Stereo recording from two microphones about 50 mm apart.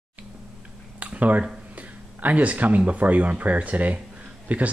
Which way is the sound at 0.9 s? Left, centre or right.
Right.